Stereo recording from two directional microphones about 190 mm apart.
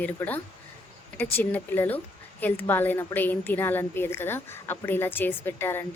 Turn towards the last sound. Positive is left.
turn(degrees=10)  # may be behind; listen again after turning